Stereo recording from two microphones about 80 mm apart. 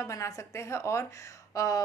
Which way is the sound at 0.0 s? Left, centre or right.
Left.